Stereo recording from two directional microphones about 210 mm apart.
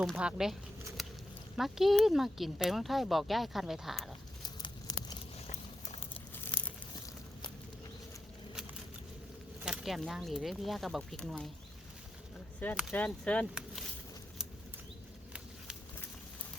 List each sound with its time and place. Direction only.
0.0 s speech: 5° right (ahead or behind)
1.0 s a sound: centre (ahead or behind)
1.5 s speech: centre (ahead or behind)
4.4 s a sound: 20° left (ahead or behind)
6.1 s crumpling: 10° left (ahead or behind)
9.6 s speech: centre (ahead or behind)
12.5 s speech: 10° left (ahead or behind)